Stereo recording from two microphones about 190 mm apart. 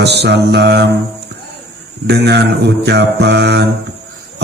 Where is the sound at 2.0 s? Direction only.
60° right (ahead or behind).